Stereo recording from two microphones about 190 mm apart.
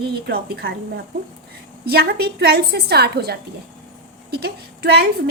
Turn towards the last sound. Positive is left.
turn(degrees=-55)  # may be behind; listen again after turning